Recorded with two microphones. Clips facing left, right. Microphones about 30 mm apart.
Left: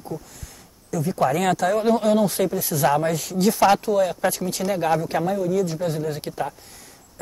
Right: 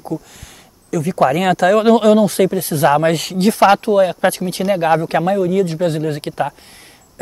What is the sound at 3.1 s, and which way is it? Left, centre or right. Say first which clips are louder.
Speech: right 8 dB; right.